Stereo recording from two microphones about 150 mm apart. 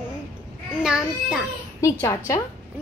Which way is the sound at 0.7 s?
5° right (ahead or behind).